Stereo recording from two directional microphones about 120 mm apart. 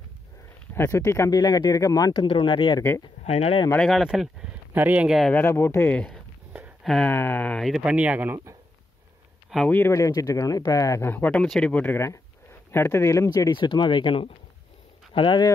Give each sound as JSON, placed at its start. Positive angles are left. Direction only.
{"t": 0.7, "sound": "speech", "side_deg": 20}
{"t": 2.1, "sound": "speech", "side_deg": 45}
{"t": 3.3, "sound": "speech", "side_deg": 55}
{"t": 3.7, "sound": "speech", "side_deg": 5}
{"t": 5.3, "sound": "speech", "side_deg": 20}
{"t": 6.8, "sound": "a sound", "side_deg": 5}
{"t": 7.1, "sound": "speech", "side_deg": 15}
{"t": 7.6, "sound": "speech", "side_deg": -5}
{"t": 9.7, "sound": "speech", "side_deg": 20}